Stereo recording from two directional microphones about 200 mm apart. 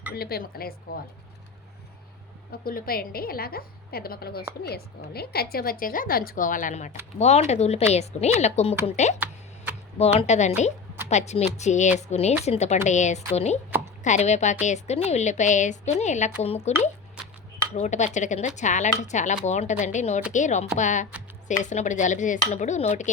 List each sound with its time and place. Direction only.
0.1 s a woman's voice: 50° left (ahead or behind)
2.5 s a woman's voice: 45° left (ahead or behind)